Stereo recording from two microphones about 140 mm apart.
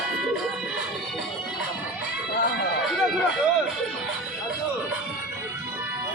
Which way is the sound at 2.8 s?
Centre (ahead or behind).